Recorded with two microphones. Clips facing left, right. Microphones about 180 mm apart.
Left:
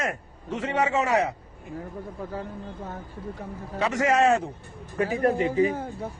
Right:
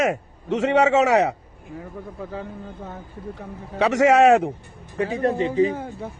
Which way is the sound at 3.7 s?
80° right.